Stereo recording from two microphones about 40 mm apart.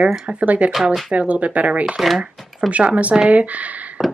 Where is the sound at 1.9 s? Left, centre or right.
Centre.